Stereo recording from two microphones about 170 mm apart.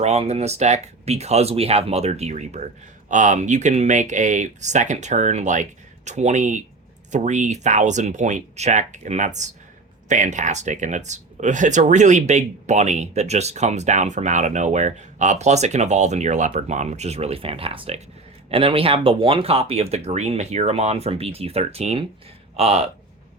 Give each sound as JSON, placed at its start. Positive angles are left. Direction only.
{"t": 0.0, "sound": "speech", "side_deg": -40}